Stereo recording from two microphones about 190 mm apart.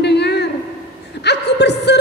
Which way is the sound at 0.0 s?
65° left (ahead or behind).